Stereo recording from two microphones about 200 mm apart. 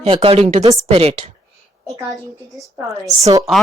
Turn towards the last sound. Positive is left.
turn(degrees=-15)  # may be behind; listen again after turning